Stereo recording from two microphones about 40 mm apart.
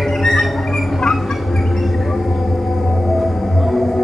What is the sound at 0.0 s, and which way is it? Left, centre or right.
Music, centre.